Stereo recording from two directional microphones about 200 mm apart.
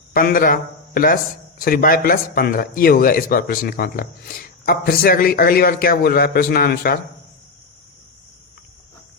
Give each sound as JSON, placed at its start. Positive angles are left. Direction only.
{"t": 0.1, "sound": "a man's voice", "side_deg": 45}